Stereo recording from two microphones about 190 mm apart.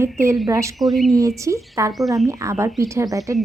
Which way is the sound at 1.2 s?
15° right (ahead or behind).